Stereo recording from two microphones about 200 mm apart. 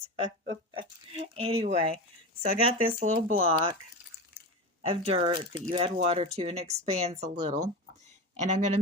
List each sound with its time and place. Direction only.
0.7 s speech: 25° right (ahead or behind)
4.8 s speech: 30° right (ahead or behind)